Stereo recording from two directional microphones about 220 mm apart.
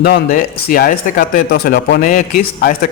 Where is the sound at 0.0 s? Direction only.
45° left (ahead or behind).